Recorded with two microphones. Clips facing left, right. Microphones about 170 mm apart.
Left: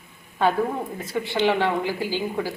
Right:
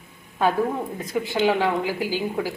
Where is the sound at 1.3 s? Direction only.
10° right (ahead or behind).